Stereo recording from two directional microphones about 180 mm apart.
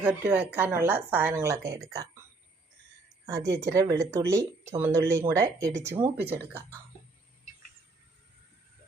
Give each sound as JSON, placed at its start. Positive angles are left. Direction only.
{"t": 0.0, "sound": "speech", "side_deg": -10}
{"t": 3.2, "sound": "speech", "side_deg": -20}